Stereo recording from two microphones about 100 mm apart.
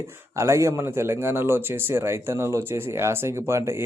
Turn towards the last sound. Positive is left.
turn(degrees=-30)  # may be behind; listen again after turning